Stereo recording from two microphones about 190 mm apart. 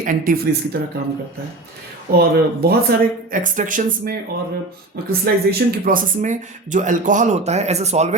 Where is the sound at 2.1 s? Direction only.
55° right (ahead or behind).